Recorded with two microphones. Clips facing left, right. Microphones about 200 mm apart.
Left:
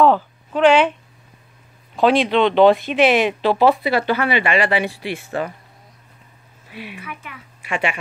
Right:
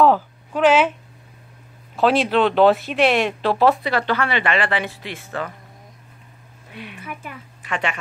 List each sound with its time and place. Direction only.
0.0 s a sound: 5° right (ahead or behind)
2.0 s speech: 5° right (ahead or behind); by 5.5 s 15° left (ahead or behind)
6.7 s a woman's voice: 5° left (ahead or behind)